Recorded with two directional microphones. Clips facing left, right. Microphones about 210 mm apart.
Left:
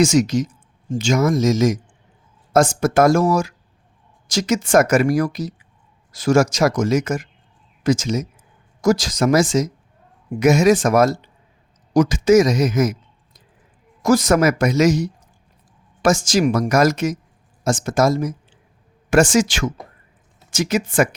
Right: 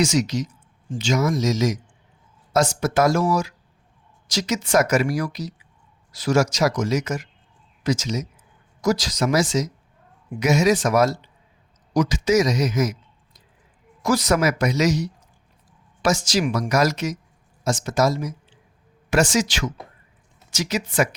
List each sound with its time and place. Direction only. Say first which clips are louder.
0.0 s speech: left 5 dB; 50° left (ahead or behind)
14.0 s speech: left 5 dB; 45° left (ahead or behind)